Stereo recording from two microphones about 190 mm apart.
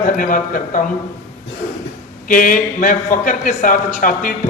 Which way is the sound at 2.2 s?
45° left (ahead or behind).